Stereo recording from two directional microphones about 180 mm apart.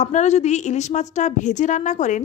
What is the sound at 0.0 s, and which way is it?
A woman's voice, 40° left (ahead or behind).